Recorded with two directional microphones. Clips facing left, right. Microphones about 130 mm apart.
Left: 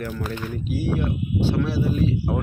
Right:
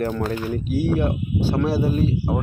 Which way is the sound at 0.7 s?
50° right (ahead or behind).